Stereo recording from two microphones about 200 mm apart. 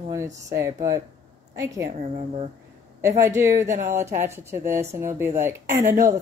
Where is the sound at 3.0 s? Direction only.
15° right (ahead or behind).